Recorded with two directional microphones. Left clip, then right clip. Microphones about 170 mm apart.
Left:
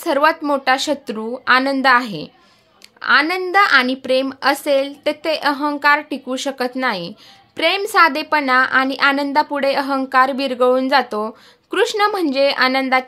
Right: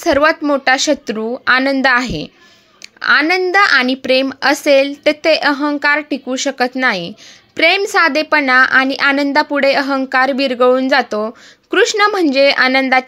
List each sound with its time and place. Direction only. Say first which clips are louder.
0.0 s a woman's voice: right 3 dB; 20° right (ahead or behind)